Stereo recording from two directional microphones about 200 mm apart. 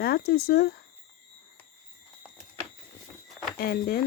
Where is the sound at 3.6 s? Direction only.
50° left (ahead or behind).